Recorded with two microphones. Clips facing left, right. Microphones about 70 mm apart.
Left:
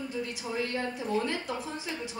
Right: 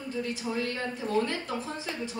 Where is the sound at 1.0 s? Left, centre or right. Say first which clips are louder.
Right 3 dB; centre.